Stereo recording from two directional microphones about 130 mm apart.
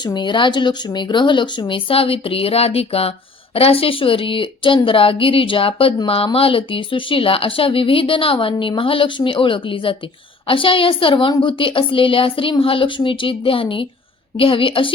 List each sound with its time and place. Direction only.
0.0 s a woman's voice: 35° left (ahead or behind)